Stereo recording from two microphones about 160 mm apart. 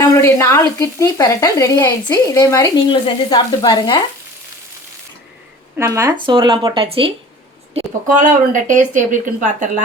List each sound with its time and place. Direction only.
0.1 s speech: 15° left (ahead or behind)
5.7 s speech: 15° right (ahead or behind)
6.1 s speech: 30° right (ahead or behind)
8.0 s speech: 55° right (ahead or behind)